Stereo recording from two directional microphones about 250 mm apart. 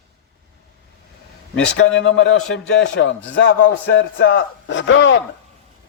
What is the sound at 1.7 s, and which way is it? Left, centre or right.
A man's voice, left.